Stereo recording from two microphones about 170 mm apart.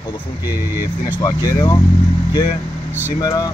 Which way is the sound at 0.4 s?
15° right (ahead or behind).